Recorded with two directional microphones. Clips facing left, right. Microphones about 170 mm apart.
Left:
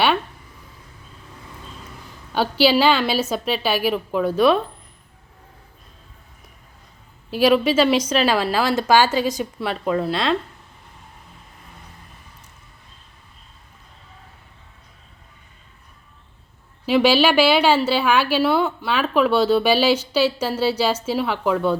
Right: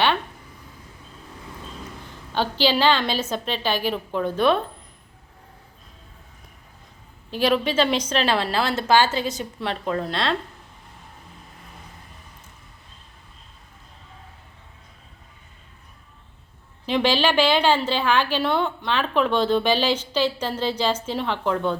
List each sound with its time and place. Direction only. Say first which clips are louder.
2.3 s a woman's voice: left 4 dB; 10° left (ahead or behind)
7.3 s a woman's voice: left 5 dB; 10° left (ahead or behind)
16.8 s a woman's voice: left 5 dB; 10° left (ahead or behind)